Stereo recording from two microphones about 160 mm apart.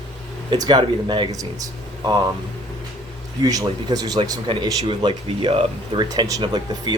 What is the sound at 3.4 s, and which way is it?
Speech, 20° right (ahead or behind).